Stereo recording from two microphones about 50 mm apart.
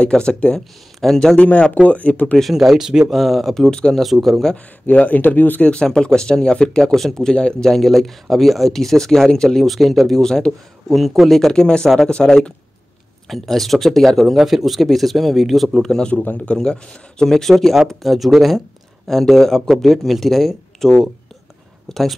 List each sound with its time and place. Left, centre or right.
0.1 s speech: centre
1.0 s speech: centre
1.3 s speech: left
2.5 s speech: centre
3.1 s speech: centre
4.0 s speech: centre
4.8 s speech: left
5.7 s speech: centre
7.7 s speech: centre
11.6 s speech: centre
13.3 s speech: centre
16.1 s speech: left
16.5 s speech: centre